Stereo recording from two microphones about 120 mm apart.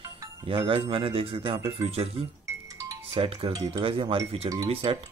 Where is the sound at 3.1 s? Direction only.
50° right (ahead or behind).